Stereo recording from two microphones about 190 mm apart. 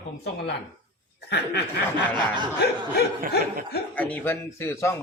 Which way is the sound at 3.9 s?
10° left (ahead or behind).